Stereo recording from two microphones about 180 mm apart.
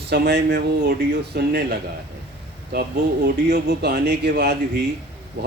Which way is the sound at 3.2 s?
60° right (ahead or behind).